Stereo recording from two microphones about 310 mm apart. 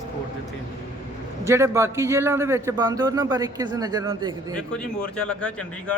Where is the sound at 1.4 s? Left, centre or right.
Centre.